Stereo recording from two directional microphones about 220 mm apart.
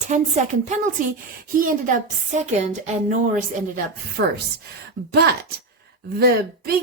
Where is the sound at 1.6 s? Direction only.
35° right (ahead or behind).